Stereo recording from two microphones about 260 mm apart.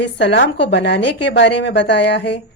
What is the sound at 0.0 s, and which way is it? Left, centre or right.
A woman's voice, left.